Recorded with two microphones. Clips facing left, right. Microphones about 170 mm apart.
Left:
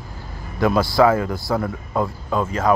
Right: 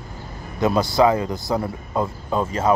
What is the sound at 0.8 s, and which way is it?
Speech, 20° right (ahead or behind).